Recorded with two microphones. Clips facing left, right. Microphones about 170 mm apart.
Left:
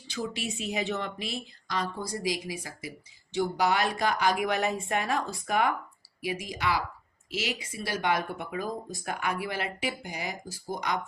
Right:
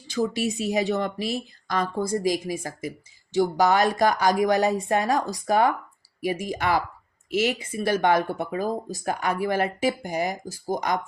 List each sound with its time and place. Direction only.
0.1 s speech: 40° right (ahead or behind)
6.2 s speech: 50° right (ahead or behind)
8.3 s speech: 35° right (ahead or behind)